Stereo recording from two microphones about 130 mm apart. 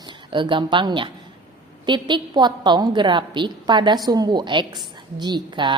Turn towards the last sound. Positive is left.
turn(degrees=-35)  # may be behind; listen again after turning